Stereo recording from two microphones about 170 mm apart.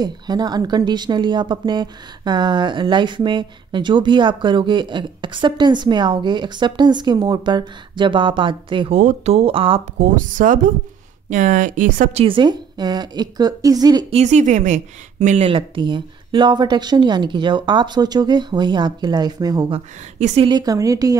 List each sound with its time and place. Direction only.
0.0 s speech: 25° right (ahead or behind)
8.9 s speech: 40° right (ahead or behind)
9.9 s speech: 50° right (ahead or behind); by 14.0 s 20° right (ahead or behind)
14.1 s speech: 45° right (ahead or behind); by 19.8 s 25° right (ahead or behind)
20.2 s speech: 40° right (ahead or behind)
20.4 s speech: 25° right (ahead or behind)